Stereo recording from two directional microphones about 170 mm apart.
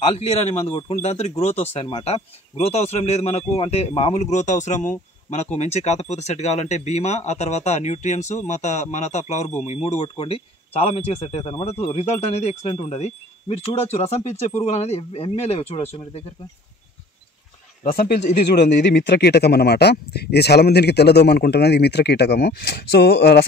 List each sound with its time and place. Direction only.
0.0 s a man's voice: 35° left (ahead or behind)
17.8 s speech: 65° left (ahead or behind)
18.3 s speech: 75° left (ahead or behind)